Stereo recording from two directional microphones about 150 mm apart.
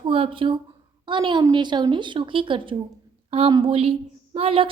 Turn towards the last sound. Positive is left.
turn(degrees=-40)  # may be behind; listen again after turning